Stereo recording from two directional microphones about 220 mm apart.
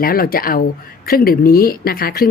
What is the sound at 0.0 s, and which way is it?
A woman's voice, 40° left (ahead or behind).